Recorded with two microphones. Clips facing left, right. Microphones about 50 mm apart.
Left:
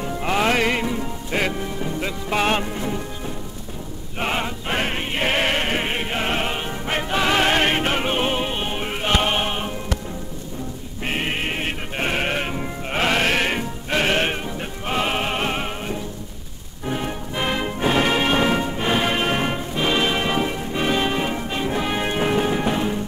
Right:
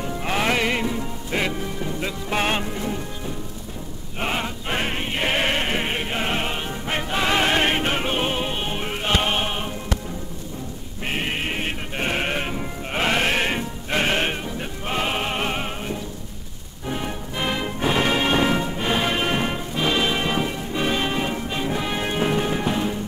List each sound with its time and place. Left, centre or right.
0.0 s music: centre
4.2 s music: centre
7.3 s music: left
7.6 s music: centre
11.1 s music: centre
13.1 s music: left
13.4 s music: centre